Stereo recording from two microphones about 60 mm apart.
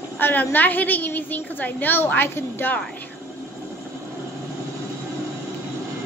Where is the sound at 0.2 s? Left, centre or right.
Left.